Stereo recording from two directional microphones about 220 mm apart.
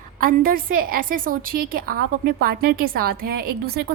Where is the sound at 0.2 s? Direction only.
40° right (ahead or behind).